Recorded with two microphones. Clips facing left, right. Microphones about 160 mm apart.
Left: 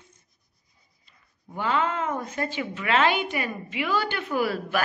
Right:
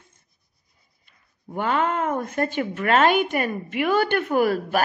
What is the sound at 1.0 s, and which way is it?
Speech, 55° right (ahead or behind).